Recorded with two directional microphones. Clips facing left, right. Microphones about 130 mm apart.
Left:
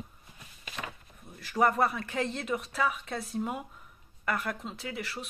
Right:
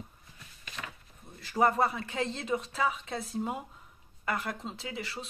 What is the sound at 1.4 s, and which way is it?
Speech, 25° right (ahead or behind).